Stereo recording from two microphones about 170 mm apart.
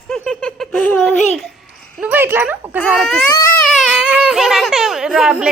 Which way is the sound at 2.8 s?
5° left (ahead or behind).